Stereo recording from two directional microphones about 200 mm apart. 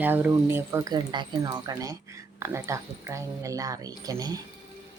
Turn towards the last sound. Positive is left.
turn(degrees=-20)  # may be behind; listen again after turning